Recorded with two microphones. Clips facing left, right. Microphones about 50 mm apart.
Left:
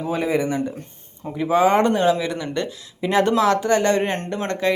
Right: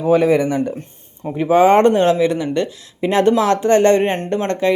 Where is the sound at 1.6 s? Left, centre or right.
Right.